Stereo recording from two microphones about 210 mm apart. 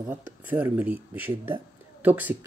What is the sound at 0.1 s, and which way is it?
Speech, 10° right (ahead or behind).